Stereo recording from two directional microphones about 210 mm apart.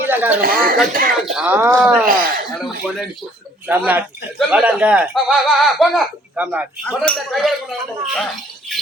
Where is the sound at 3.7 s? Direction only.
10° right (ahead or behind).